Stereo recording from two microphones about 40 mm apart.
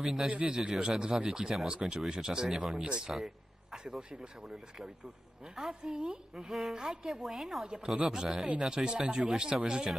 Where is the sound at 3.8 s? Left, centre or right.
Right.